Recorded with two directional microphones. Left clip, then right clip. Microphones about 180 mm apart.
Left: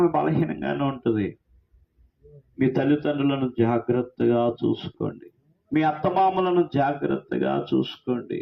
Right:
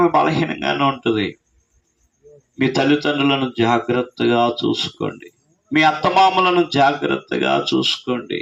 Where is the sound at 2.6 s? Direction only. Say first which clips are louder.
Right 6 dB; 15° right (ahead or behind).